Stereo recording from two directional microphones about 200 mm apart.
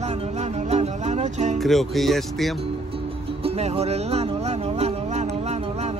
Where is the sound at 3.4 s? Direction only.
30° right (ahead or behind).